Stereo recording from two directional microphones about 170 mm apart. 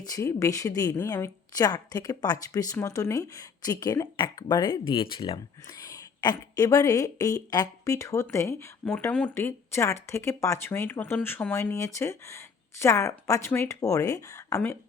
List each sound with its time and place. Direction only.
0.0 s a woman's voice: 20° left (ahead or behind)